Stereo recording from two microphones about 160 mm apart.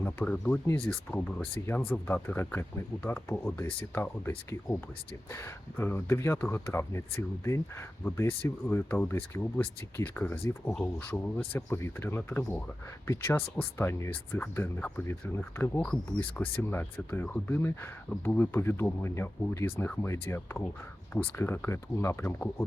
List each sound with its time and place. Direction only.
0.0 s speech: 10° left (ahead or behind)
1.9 s speech: 10° left (ahead or behind)